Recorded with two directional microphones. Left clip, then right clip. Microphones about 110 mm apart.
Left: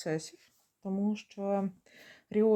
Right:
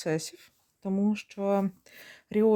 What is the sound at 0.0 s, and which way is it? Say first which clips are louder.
Speech: right 4 dB; 45° right (ahead or behind).